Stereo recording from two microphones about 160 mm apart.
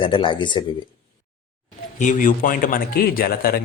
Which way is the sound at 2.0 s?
55° left (ahead or behind).